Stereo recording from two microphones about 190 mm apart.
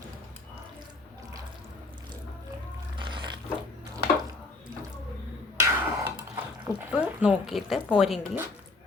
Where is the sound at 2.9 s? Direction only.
25° right (ahead or behind).